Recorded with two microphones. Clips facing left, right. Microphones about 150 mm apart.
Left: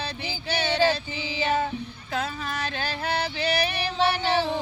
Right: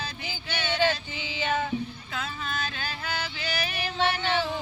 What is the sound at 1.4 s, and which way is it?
Music, 35° left (ahead or behind).